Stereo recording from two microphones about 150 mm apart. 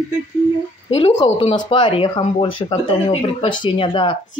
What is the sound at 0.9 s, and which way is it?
Speech, 45° left (ahead or behind).